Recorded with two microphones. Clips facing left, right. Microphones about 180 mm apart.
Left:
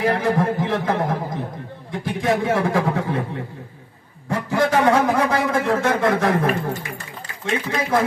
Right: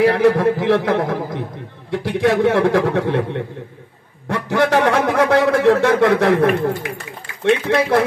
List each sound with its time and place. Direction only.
0.0 s a man's voice: 70° right (ahead or behind)
4.3 s a man's voice: 75° right (ahead or behind)